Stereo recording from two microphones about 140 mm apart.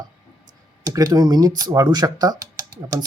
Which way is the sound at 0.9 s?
25° right (ahead or behind).